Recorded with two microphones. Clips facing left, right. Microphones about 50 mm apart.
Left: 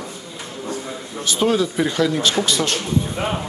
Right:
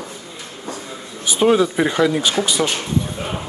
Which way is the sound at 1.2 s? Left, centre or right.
Centre.